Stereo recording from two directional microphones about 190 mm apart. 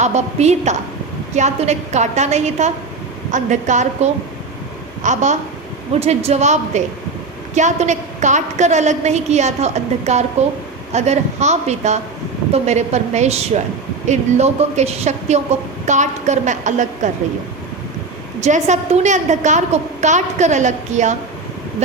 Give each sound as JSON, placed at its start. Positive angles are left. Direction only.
{"t": 0.0, "sound": "a woman's voice", "side_deg": -35}
{"t": 18.3, "sound": "a woman's voice", "side_deg": -35}